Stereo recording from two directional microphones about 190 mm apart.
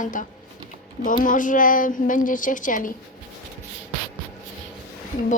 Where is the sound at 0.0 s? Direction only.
45° left (ahead or behind).